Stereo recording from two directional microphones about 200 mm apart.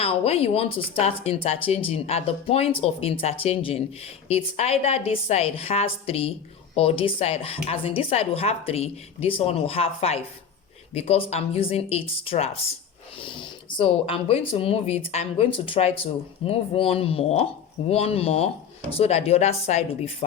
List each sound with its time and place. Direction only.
0.0 s a woman's voice: 30° left (ahead or behind)